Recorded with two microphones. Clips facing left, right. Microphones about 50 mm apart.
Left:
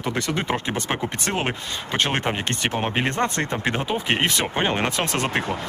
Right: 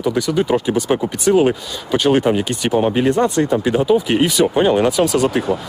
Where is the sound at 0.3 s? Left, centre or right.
Left.